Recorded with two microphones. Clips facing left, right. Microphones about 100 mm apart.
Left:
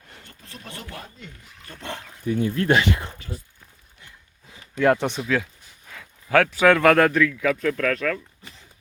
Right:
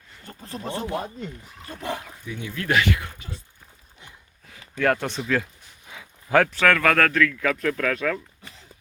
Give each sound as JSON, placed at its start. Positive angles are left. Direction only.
{"t": 0.3, "sound": "speech", "side_deg": -35}
{"t": 1.7, "sound": "speech", "side_deg": -10}
{"t": 2.2, "sound": "speech", "side_deg": 45}
{"t": 3.2, "sound": "speech", "side_deg": -25}
{"t": 4.5, "sound": "speech", "side_deg": 20}
{"t": 5.2, "sound": "speech", "side_deg": 0}
{"t": 5.9, "sound": "a sound", "side_deg": -5}
{"t": 6.6, "sound": "speech", "side_deg": 20}